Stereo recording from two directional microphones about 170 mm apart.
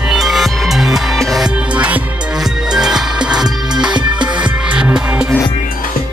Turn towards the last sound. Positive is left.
turn(degrees=-5)  # may be behind; listen again after turning